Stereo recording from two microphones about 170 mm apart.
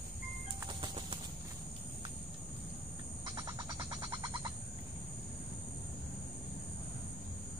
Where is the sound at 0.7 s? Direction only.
30° right (ahead or behind).